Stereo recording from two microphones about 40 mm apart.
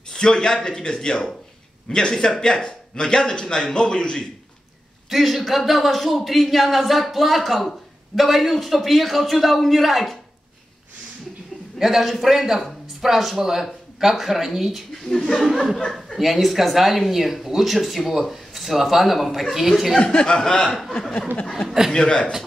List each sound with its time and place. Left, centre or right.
0.1 s a man's voice: centre
5.1 s speech: centre
11.8 s speech: centre
15.0 s speech: centre
15.4 s speech: centre
20.0 s a man's voice: left
21.5 s speech: centre
21.9 s a man's voice: centre